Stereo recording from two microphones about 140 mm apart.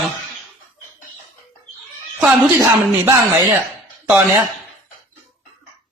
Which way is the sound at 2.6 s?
20° right (ahead or behind).